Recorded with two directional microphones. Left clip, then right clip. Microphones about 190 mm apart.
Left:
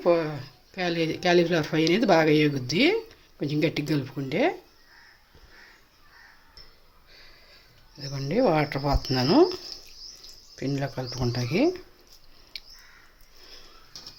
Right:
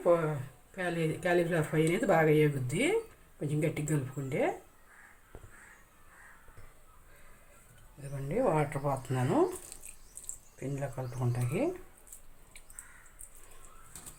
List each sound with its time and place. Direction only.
0.8 s speech: 60° left (ahead or behind)
8.0 s speech: 65° left (ahead or behind)
10.6 s speech: 65° left (ahead or behind)